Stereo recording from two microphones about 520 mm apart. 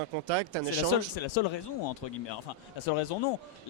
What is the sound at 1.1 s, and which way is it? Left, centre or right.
Speech, left.